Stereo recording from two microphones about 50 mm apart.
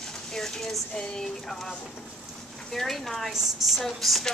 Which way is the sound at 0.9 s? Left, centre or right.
Centre.